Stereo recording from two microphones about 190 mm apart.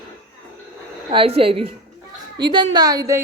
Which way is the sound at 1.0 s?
30° right (ahead or behind).